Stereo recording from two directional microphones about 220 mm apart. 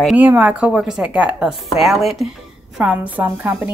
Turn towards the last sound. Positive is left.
turn(degrees=-5)  # may be behind; listen again after turning